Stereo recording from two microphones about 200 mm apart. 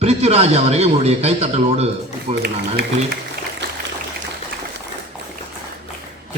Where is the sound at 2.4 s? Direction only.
50° right (ahead or behind).